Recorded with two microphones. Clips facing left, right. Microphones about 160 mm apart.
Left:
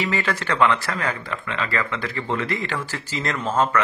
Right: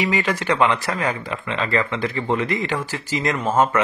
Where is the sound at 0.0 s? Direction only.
15° right (ahead or behind).